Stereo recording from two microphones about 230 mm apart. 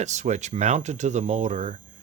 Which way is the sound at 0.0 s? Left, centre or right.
Right.